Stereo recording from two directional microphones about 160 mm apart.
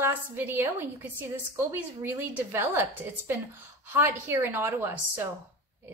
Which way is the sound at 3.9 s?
15° right (ahead or behind).